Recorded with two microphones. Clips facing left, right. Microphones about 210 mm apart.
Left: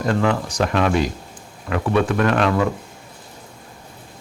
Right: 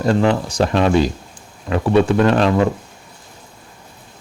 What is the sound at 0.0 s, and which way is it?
Speech, 30° right (ahead or behind).